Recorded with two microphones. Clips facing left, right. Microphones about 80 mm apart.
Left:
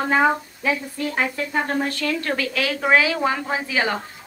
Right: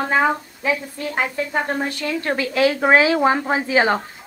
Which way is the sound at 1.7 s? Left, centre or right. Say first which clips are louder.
Even; centre.